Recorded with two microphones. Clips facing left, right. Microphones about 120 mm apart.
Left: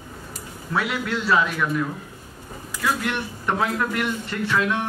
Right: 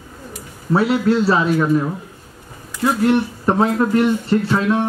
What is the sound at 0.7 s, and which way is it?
Speech, 30° right (ahead or behind).